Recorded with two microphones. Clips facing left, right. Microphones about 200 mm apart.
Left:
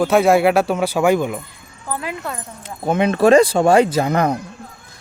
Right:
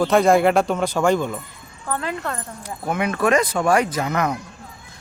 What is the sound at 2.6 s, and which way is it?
Speech, 25° left (ahead or behind).